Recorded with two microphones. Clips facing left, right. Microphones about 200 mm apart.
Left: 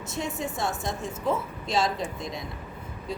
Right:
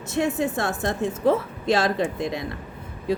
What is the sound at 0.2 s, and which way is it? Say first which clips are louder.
Speech: right 7 dB; 60° right (ahead or behind).